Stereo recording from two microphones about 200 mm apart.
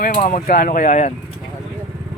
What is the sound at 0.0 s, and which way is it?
Speech, 40° left (ahead or behind).